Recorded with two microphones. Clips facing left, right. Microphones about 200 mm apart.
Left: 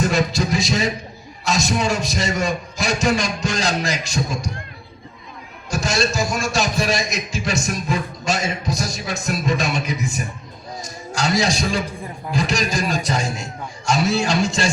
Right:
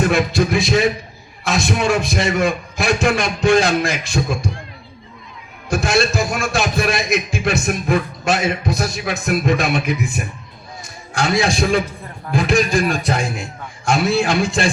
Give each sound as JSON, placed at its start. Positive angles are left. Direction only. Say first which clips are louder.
{"t": 0.0, "sound": "a man's voice", "louder": "right 3 dB", "side_deg": -60}
{"t": 5.7, "sound": "a man's voice", "louder": "right 4 dB", "side_deg": -55}